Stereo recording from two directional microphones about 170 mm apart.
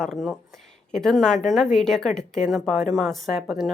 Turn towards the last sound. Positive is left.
turn(degrees=0)  # may be behind; listen again after turning